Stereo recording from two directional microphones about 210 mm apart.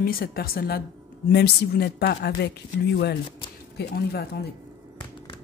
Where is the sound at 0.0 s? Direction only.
45° left (ahead or behind).